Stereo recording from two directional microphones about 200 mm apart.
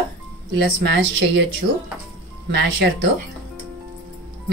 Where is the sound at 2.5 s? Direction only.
60° right (ahead or behind).